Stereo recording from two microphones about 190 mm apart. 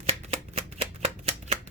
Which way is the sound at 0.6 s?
30° right (ahead or behind).